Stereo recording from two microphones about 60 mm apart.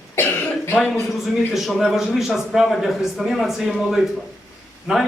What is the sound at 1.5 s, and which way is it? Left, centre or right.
A man's voice, centre.